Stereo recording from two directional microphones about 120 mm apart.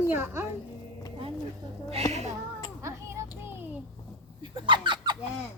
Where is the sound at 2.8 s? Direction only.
25° right (ahead or behind).